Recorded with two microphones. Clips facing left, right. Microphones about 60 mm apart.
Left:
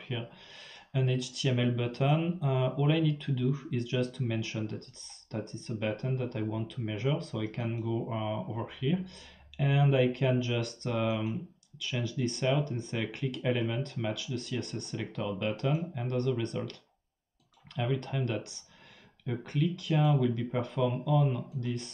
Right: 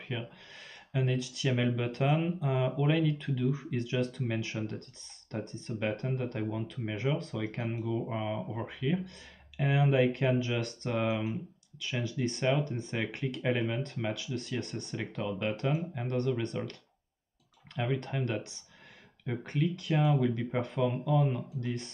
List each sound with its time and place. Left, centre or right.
0.0 s speech: right
17.7 s speech: right